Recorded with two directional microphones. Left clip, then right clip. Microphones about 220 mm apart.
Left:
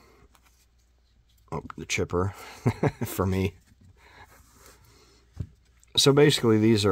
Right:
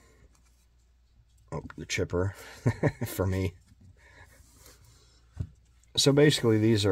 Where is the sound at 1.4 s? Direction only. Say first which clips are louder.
Left 4 dB; 25° left (ahead or behind).